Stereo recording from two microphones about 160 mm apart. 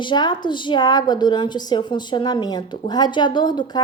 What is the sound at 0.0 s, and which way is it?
A woman's voice, 30° left (ahead or behind).